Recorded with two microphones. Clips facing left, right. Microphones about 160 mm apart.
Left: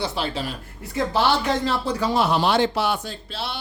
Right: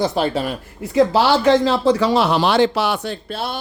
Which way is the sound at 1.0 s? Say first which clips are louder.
Right 7 dB; 90° right.